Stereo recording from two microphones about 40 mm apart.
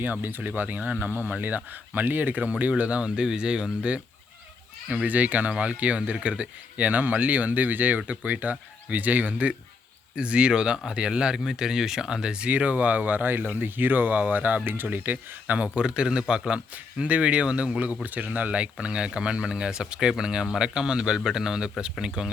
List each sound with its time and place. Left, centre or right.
0.0 s speech: right
0.8 s speech: right
1.2 s speech: right
4.9 s speech: right
10.2 s speech: right
12.3 s speech: right
16.7 s speech: right
18.0 s speech: right; by 22.3 s centre